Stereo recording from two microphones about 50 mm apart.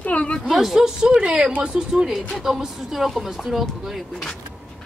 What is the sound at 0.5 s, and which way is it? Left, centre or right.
Speech, centre.